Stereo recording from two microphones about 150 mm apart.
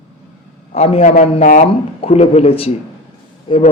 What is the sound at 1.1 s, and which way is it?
Speech, 60° left (ahead or behind).